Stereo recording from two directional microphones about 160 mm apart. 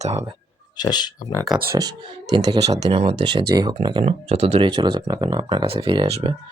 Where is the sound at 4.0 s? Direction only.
40° right (ahead or behind).